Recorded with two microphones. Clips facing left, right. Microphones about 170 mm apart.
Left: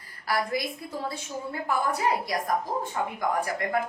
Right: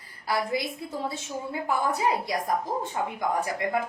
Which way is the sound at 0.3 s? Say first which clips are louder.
Even; 20° right (ahead or behind).